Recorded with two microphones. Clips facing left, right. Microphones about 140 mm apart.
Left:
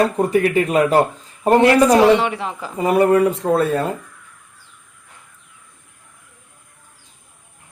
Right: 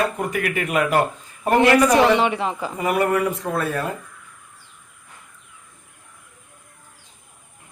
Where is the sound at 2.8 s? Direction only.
25° left (ahead or behind).